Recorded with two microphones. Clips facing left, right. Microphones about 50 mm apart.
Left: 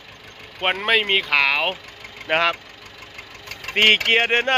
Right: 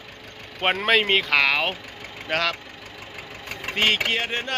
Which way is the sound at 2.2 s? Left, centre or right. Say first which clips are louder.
Left 5 dB; left.